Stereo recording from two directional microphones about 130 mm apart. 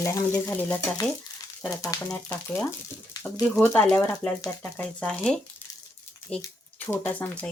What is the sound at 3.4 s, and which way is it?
Speech, 15° left (ahead or behind).